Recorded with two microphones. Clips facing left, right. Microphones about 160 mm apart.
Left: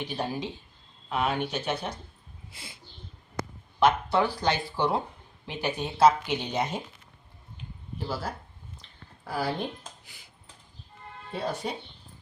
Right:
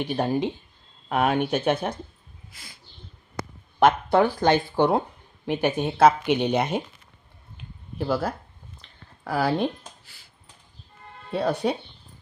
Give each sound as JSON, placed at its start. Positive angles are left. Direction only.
{"t": 0.0, "sound": "speech", "side_deg": -55}
{"t": 2.5, "sound": "a sound", "side_deg": 25}
{"t": 3.8, "sound": "speech", "side_deg": -50}
{"t": 7.9, "sound": "speech", "side_deg": -60}
{"t": 8.8, "sound": "a sound", "side_deg": -65}
{"t": 11.3, "sound": "speech", "side_deg": -65}